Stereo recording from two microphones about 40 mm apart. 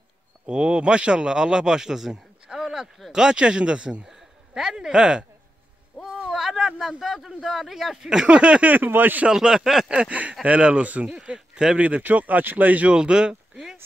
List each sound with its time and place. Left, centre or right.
0.5 s speech: right
2.4 s a sound: centre
3.1 s speech: centre
4.1 s speech: centre
6.3 s a sound: centre
7.2 s speech: centre
8.3 s speech: right
8.7 s speech: right
9.3 s speech: centre
9.8 s speech: right
10.4 s speech: right
11.2 s speech: right
12.0 s speech: right
12.9 s speech: right